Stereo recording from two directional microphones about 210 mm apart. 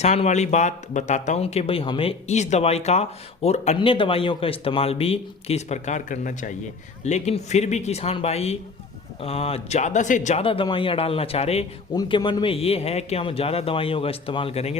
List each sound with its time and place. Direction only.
0.0 s a man's voice: 30° left (ahead or behind)